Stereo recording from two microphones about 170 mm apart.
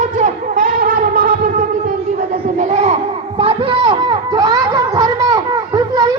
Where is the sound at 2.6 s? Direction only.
40° right (ahead or behind).